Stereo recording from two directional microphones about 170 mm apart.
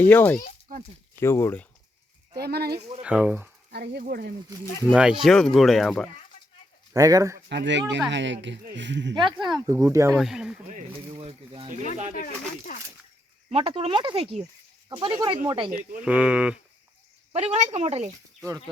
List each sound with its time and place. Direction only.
0.1 s speech: 10° left (ahead or behind)
2.4 s speech: 70° right (ahead or behind)
3.0 s speech: 10° right (ahead or behind)
3.7 s speech: 70° right (ahead or behind)
4.0 s speech: 60° right (ahead or behind)
4.9 s speech: 5° right (ahead or behind)
6.9 s speech: 20° right (ahead or behind)
7.4 s speech: 90° right
9.1 s speech: 25° right (ahead or behind)
10.2 s speech: 5° right (ahead or behind)
11.1 s speech: 35° right (ahead or behind)
13.5 s speech: 30° right (ahead or behind)
16.0 s speech: 5° right (ahead or behind)
17.3 s speech: 40° right (ahead or behind)